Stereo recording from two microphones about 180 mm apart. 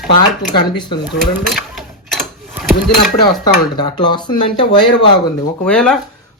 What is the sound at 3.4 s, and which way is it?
Speech, 25° left (ahead or behind).